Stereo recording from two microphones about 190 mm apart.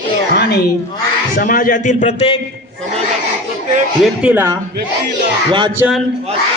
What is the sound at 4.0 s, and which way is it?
Speech, 5° right (ahead or behind).